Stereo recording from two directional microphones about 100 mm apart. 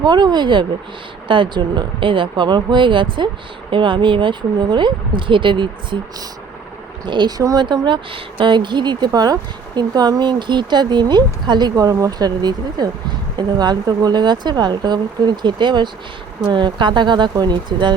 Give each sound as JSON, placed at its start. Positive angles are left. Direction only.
{"t": 0.0, "sound": "speech", "side_deg": -45}